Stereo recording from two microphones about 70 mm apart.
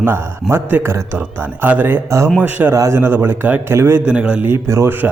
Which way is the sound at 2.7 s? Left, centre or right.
Right.